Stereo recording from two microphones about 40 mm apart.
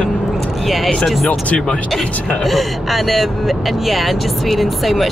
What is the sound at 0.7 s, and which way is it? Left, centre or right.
Speech, centre.